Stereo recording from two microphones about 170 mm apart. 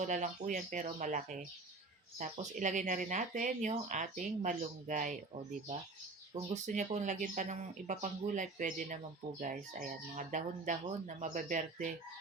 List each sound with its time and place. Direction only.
0.0 s speech: 45° right (ahead or behind)
6.5 s speech: 45° right (ahead or behind)